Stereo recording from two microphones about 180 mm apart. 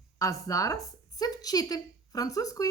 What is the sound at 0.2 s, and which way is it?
A woman's voice, 20° left (ahead or behind).